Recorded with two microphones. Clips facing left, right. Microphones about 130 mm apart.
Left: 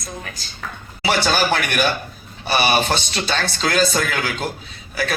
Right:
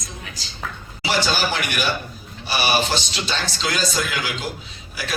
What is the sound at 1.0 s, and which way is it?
A woman's voice, 55° left (ahead or behind).